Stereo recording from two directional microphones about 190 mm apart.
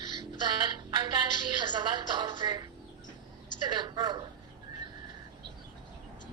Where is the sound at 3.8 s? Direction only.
20° right (ahead or behind).